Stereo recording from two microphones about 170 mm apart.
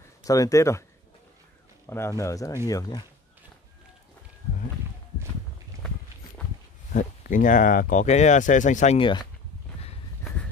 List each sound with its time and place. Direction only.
0.2 s speech: 20° left (ahead or behind)
1.9 s speech: 15° left (ahead or behind)
6.9 s speech: 50° left (ahead or behind); by 9.2 s 30° left (ahead or behind)
10.2 s walk: 5° left (ahead or behind)